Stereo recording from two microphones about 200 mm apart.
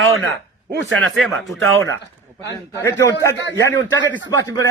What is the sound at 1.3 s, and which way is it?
Speech, 85° right.